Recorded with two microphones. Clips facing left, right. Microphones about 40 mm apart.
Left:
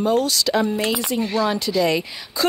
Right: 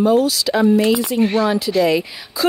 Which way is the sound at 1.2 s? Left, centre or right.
Right.